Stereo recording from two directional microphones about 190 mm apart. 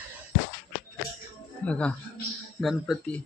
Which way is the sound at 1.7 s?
5° left (ahead or behind).